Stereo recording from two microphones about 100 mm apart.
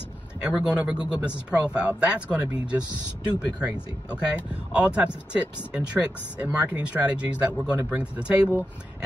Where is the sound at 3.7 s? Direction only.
40° right (ahead or behind).